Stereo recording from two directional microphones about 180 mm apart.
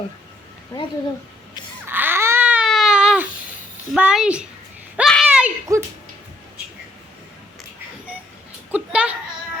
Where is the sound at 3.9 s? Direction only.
5° right (ahead or behind).